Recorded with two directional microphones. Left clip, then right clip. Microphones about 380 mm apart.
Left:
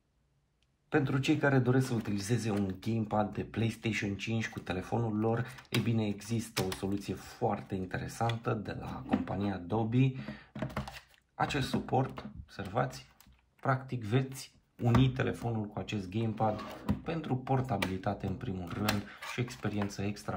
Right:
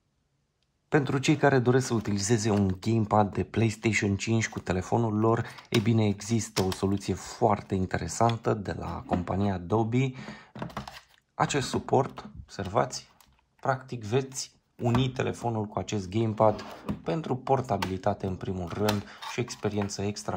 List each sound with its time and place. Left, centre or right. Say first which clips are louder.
0.8 s speech: right 5 dB; centre